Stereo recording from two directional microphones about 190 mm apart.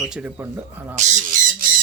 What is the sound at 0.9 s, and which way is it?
Speech, 40° right (ahead or behind).